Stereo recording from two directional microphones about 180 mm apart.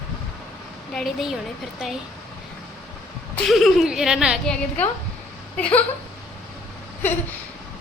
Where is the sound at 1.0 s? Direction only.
Centre (ahead or behind).